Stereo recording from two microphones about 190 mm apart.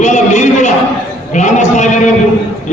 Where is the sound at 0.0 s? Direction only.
40° left (ahead or behind).